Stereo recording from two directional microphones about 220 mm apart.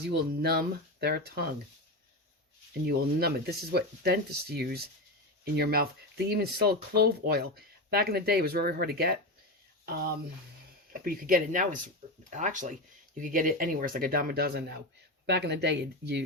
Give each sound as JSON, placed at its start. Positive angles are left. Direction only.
{"t": 0.1, "sound": "speech", "side_deg": -45}
{"t": 2.8, "sound": "speech", "side_deg": -45}